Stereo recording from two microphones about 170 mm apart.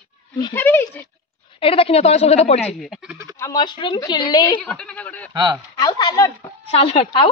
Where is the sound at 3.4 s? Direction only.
20° left (ahead or behind).